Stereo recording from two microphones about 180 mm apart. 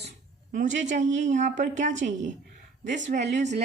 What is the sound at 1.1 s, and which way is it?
Speech, 40° right (ahead or behind).